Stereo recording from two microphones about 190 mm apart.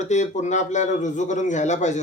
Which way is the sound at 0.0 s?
40° left (ahead or behind).